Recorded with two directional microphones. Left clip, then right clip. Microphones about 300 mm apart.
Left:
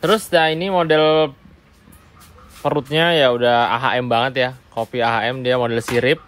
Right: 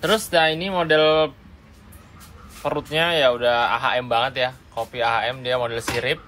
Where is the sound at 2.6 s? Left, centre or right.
Left.